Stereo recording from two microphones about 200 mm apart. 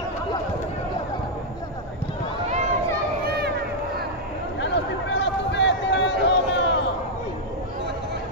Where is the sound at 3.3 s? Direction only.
55° right (ahead or behind).